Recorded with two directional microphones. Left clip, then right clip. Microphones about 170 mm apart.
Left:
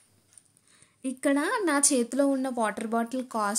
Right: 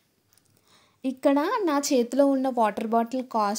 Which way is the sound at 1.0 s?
20° right (ahead or behind).